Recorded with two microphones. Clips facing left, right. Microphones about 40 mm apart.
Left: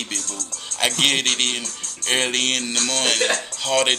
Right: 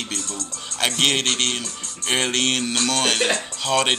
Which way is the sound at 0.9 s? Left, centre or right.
Left.